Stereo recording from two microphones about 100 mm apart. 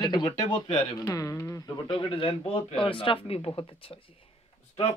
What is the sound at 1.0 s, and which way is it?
Speech, 35° left (ahead or behind).